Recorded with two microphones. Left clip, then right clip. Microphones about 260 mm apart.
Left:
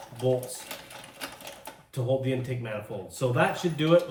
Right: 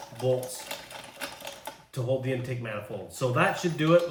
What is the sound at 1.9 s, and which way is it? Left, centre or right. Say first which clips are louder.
Speech: left 1 dB; centre.